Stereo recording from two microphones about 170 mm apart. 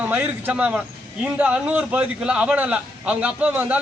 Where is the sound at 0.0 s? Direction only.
10° right (ahead or behind).